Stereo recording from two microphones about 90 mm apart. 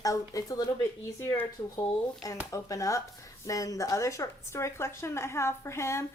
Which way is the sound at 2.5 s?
40° left (ahead or behind).